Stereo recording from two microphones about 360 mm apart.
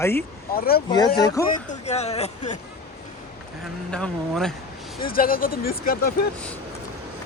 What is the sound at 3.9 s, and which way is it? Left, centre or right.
Speech, centre.